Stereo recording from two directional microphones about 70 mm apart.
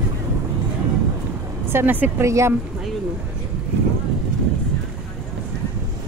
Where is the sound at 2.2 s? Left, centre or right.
Right.